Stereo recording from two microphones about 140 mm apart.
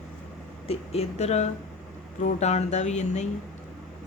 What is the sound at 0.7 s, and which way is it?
Speech, 45° left (ahead or behind).